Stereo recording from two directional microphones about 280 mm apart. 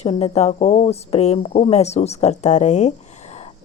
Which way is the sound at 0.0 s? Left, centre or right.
Left.